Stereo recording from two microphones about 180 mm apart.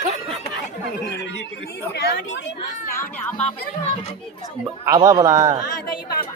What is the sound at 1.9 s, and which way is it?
Speech, 70° left (ahead or behind).